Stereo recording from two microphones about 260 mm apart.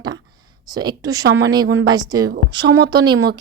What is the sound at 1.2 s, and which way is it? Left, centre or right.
Speech, right.